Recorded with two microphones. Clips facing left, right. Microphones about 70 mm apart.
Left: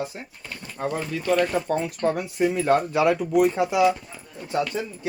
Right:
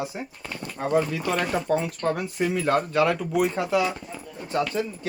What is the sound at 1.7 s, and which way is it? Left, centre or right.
Speech, centre.